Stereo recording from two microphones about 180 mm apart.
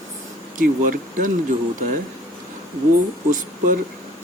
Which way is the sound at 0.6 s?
50° right (ahead or behind).